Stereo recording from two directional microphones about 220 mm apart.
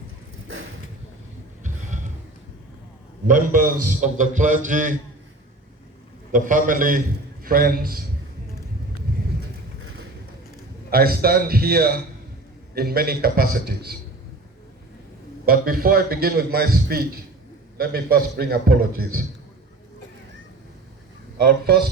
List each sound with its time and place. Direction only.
3.2 s a man's voice: 35° right (ahead or behind)
6.3 s a man's voice: 35° right (ahead or behind)
10.9 s a man's voice: 45° right (ahead or behind)
15.4 s a man's voice: 40° right (ahead or behind)
21.3 s a man's voice: 45° right (ahead or behind)